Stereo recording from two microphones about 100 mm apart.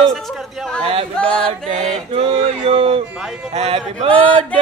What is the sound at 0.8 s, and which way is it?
Yodeling, 75° right (ahead or behind).